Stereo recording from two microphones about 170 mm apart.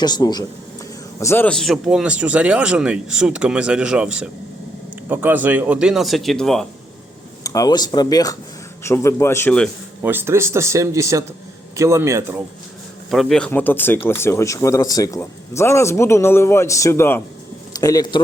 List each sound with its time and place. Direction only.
0.0 s speech: 25° left (ahead or behind)
1.2 s speech: 15° left (ahead or behind)
7.4 s speech: 20° left (ahead or behind)
10.0 s speech: 15° right (ahead or behind)
13.1 s speech: centre (ahead or behind); by 18.2 s 25° left (ahead or behind)